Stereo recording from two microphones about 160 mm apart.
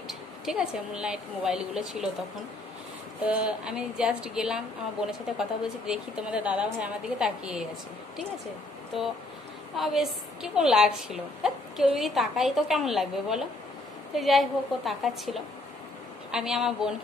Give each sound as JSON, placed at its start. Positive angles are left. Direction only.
{"t": 0.1, "sound": "a woman's voice", "side_deg": -5}
{"t": 3.3, "sound": "a woman's voice", "side_deg": -10}
{"t": 9.8, "sound": "a woman's voice", "side_deg": 0}